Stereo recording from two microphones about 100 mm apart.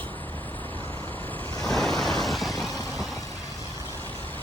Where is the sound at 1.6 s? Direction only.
5° left (ahead or behind).